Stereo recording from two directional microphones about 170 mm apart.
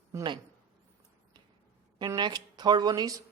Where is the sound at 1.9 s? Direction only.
25° right (ahead or behind).